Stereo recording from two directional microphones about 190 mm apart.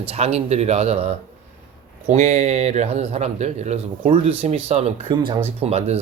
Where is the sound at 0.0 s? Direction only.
35° right (ahead or behind).